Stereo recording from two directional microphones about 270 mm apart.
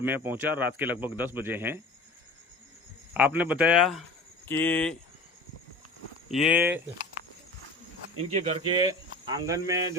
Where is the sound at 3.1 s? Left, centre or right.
Centre.